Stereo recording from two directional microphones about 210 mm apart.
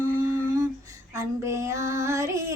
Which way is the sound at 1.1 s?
15° right (ahead or behind).